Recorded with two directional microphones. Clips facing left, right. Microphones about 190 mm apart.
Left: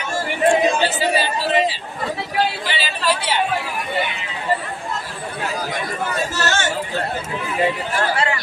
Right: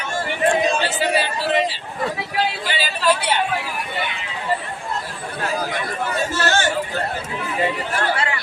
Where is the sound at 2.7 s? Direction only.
50° right (ahead or behind).